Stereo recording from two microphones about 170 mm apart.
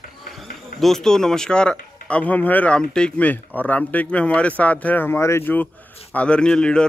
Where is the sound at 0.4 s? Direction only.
Centre (ahead or behind).